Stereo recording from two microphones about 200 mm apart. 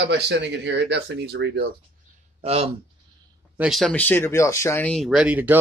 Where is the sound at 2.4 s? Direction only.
30° right (ahead or behind).